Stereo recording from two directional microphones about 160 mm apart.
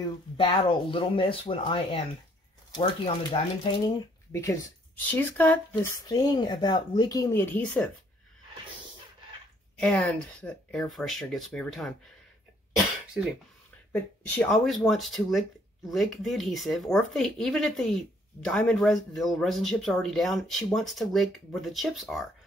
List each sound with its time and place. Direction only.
0.4 s speech: 35° left (ahead or behind)
4.3 s speech: 20° left (ahead or behind)
6.0 s speech: 25° left (ahead or behind)
9.8 s speech: 5° left (ahead or behind)
12.7 s cough: 5° right (ahead or behind)
14.2 s speech: 10° left (ahead or behind)